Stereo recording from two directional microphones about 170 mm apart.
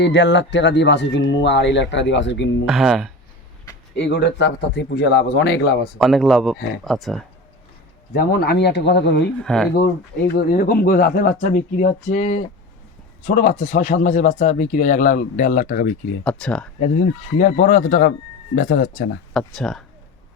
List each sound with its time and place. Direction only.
0.0 s speech: 90° left
2.6 s speech: centre (ahead or behind)
3.9 s speech: 85° left
6.0 s speech: centre (ahead or behind)
8.1 s speech: 65° left (ahead or behind); by 9.3 s 90° left
9.4 s speech: 5° left (ahead or behind)
9.7 s speech: 65° left (ahead or behind)
16.2 s speech: 5° left (ahead or behind)
17.4 s speech: 45° left (ahead or behind)
19.3 s speech: centre (ahead or behind)